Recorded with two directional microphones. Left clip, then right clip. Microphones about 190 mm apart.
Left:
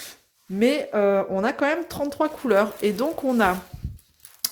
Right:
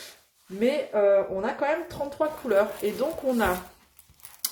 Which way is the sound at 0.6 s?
50° left (ahead or behind).